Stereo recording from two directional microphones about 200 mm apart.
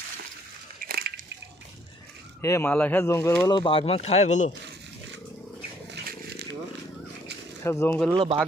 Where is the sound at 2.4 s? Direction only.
15° left (ahead or behind); by 4.5 s 35° left (ahead or behind).